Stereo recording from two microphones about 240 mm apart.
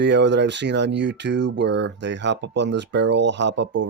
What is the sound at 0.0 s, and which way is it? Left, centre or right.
Speech, right.